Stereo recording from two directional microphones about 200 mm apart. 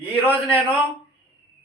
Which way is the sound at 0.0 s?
10° left (ahead or behind).